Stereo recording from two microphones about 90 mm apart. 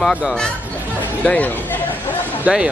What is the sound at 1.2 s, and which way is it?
Speech, 15° left (ahead or behind).